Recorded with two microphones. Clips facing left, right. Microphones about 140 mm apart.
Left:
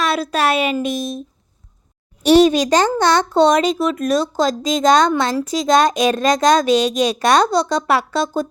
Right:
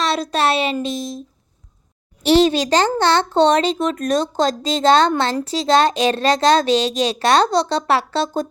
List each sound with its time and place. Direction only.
0.0 s a sound: 10° left (ahead or behind)
0.3 s a woman's voice: 35° right (ahead or behind)
0.8 s speech: 20° left (ahead or behind)
2.2 s a child's voice: 25° right (ahead or behind)
3.0 s a child's voice: 15° left (ahead or behind)
3.7 s a woman's voice: 40° right (ahead or behind)